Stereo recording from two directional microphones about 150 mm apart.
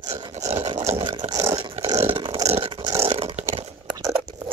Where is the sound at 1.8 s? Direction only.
15° right (ahead or behind).